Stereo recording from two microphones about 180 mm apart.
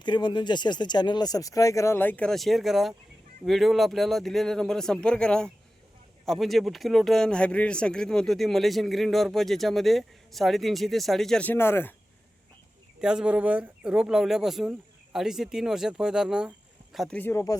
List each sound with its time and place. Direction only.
0.0 s speech: 25° left (ahead or behind)
13.0 s speech: 5° right (ahead or behind)
17.2 s speech: 15° left (ahead or behind)